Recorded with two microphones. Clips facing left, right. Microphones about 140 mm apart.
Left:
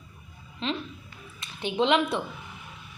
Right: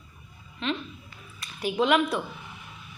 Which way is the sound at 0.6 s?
30° left (ahead or behind).